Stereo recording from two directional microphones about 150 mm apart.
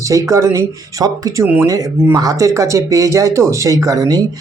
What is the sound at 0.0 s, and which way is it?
Speech, 20° right (ahead or behind).